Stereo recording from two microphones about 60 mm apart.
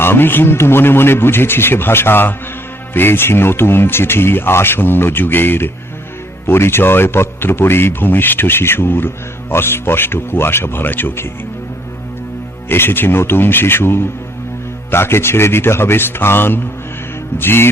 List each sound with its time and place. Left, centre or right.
0.0 s a man's voice: left
12.6 s a man's voice: left